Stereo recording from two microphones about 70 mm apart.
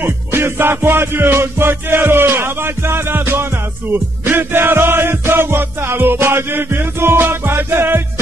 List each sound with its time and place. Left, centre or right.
0.0 s music: right